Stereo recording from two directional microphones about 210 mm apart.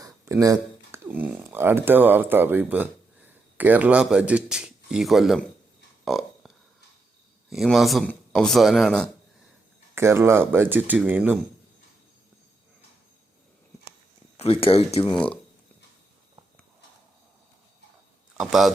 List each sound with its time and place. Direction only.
0.0 s speech: 15° right (ahead or behind)
6.1 s a sound: centre (ahead or behind)
7.5 s speech: centre (ahead or behind)
9.9 s speech: 10° right (ahead or behind)
14.3 s speech: 25° left (ahead or behind)
15.1 s speech: 5° left (ahead or behind)
18.3 s speech: centre (ahead or behind)